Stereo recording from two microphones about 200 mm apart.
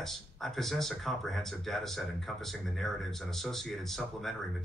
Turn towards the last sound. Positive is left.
turn(degrees=0)  # may be behind; listen again after turning